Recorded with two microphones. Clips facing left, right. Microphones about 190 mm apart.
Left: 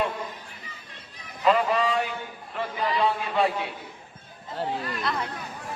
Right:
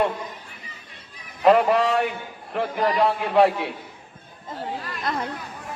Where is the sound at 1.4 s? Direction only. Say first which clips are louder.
Right 5 dB; 65° right (ahead or behind).